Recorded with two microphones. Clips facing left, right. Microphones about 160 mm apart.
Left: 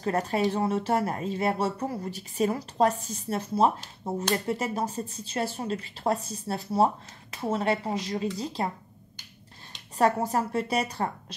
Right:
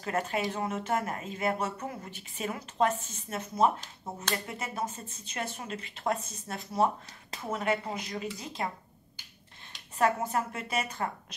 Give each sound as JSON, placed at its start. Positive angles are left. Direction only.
{"t": 0.0, "sound": "speech", "side_deg": 35}
{"t": 9.9, "sound": "speech", "side_deg": 35}